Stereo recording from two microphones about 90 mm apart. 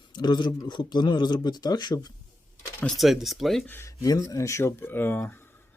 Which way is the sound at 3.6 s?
25° left (ahead or behind).